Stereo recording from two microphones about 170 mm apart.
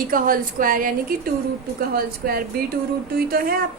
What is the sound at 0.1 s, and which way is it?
A woman's voice, 55° right (ahead or behind).